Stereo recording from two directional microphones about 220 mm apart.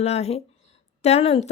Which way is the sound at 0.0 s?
30° left (ahead or behind).